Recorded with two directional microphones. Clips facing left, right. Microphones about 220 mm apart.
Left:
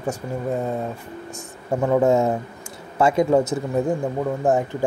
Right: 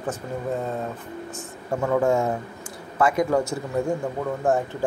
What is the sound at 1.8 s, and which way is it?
A man's voice, 20° left (ahead or behind).